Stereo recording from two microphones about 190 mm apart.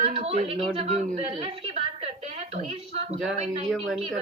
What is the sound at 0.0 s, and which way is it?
A woman's voice, 30° right (ahead or behind).